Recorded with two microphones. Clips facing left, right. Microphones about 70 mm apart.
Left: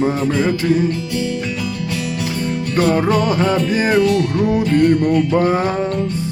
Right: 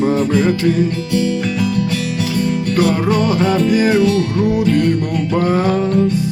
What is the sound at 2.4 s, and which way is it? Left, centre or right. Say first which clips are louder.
Music: even; left.